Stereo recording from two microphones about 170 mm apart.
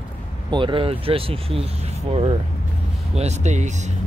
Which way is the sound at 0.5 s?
30° right (ahead or behind).